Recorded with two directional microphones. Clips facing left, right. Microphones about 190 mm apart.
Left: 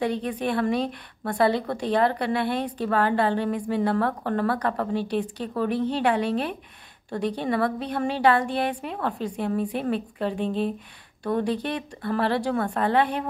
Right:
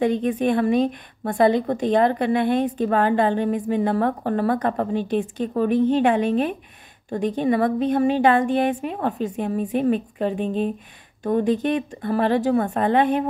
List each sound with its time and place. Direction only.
0.0 s a woman's voice: 20° right (ahead or behind)